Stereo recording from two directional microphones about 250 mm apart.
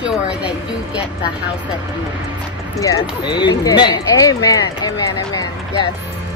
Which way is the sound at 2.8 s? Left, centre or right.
Centre.